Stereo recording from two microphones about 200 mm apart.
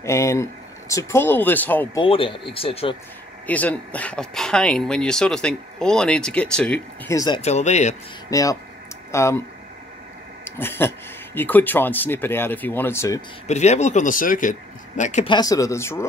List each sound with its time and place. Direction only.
0.0 s speech: 15° left (ahead or behind)
2.0 s speech: 25° left (ahead or behind)
3.4 s speech: 5° left (ahead or behind)
7.4 s speech: 35° left (ahead or behind)
8.3 s speech: 15° left (ahead or behind)
10.4 s a sound: 10° left (ahead or behind)
11.3 s speech: 10° left (ahead or behind)
13.5 s speech: 35° left (ahead or behind)
15.2 s speech: 20° left (ahead or behind)